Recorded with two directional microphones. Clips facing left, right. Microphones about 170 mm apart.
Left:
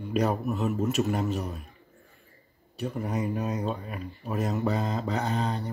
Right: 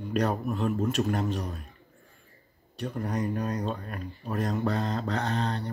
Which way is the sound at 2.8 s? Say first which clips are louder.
Left 1 dB; 5° left (ahead or behind).